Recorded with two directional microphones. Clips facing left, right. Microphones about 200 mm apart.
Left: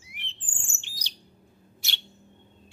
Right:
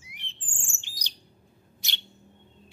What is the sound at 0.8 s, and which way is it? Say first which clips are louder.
Bird: even; 15° right (ahead or behind).